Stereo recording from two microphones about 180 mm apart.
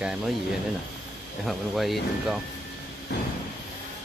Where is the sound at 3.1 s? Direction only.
65° left (ahead or behind).